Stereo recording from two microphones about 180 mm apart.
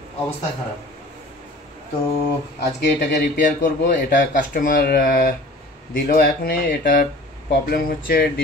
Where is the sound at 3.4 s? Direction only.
45° left (ahead or behind).